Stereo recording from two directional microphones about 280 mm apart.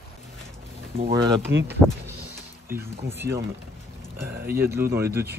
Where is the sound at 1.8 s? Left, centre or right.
Centre.